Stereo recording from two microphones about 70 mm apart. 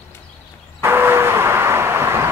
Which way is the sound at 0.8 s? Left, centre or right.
Right.